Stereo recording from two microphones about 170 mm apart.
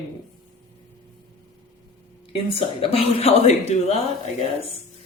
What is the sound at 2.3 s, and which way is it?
Speech, 35° left (ahead or behind).